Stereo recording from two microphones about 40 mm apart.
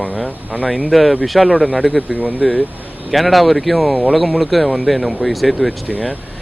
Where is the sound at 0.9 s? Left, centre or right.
Centre.